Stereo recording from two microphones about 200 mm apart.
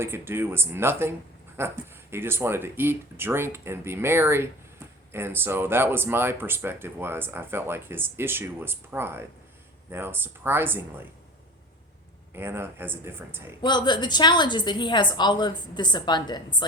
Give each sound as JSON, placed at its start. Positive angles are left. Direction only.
{"t": 0.0, "sound": "speech", "side_deg": -10}
{"t": 12.3, "sound": "speech", "side_deg": -10}
{"t": 13.6, "sound": "a woman's voice", "side_deg": 20}